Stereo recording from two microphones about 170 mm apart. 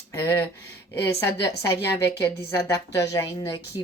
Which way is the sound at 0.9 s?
20° left (ahead or behind).